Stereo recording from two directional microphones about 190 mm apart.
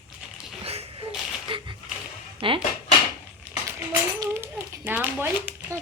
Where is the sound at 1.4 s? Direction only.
25° right (ahead or behind).